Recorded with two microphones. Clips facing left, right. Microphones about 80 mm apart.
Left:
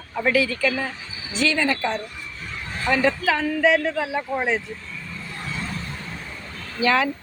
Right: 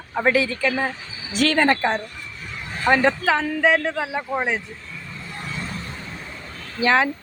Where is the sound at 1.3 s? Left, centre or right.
Right; by 4.6 s centre.